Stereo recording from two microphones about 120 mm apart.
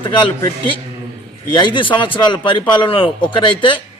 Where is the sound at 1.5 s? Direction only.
40° left (ahead or behind).